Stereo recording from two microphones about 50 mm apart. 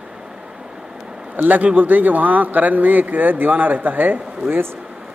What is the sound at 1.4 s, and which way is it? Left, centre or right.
A man's voice, right.